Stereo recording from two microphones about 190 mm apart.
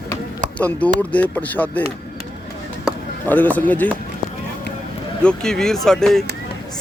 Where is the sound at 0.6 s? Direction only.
10° left (ahead or behind).